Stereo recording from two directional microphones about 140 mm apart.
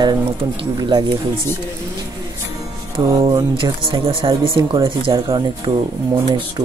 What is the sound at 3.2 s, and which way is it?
Speech, 35° right (ahead or behind).